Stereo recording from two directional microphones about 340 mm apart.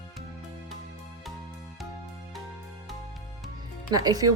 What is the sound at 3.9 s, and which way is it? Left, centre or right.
Speech, centre.